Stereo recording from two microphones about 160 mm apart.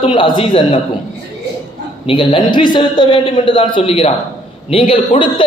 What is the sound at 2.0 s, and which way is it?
A woman's voice, 30° left (ahead or behind).